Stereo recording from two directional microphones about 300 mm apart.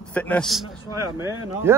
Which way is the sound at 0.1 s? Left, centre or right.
Centre.